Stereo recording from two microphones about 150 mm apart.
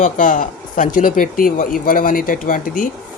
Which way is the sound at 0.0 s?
60° left (ahead or behind).